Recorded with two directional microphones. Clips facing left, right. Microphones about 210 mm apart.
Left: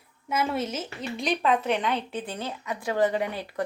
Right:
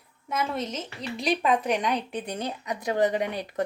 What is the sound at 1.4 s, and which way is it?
A woman's voice, 10° right (ahead or behind).